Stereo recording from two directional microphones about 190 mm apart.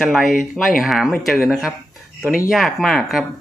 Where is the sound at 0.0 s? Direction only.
Centre (ahead or behind).